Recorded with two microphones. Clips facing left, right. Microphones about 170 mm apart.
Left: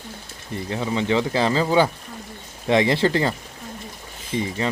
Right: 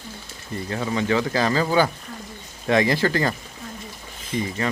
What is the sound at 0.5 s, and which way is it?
Speech, 20° left (ahead or behind).